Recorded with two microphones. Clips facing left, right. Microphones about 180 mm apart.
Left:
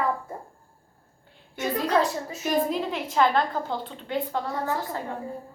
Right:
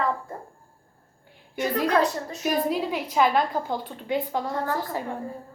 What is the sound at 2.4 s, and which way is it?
A woman's voice, 5° right (ahead or behind).